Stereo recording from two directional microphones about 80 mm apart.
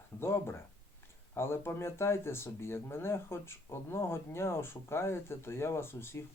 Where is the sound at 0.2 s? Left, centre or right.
Left.